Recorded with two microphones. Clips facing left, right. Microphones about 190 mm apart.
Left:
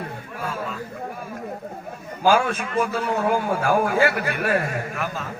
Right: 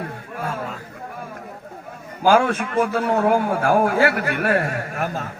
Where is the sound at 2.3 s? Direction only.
55° right (ahead or behind).